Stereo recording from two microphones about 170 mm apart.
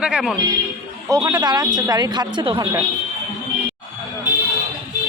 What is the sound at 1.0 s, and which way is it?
A man's voice, 20° right (ahead or behind).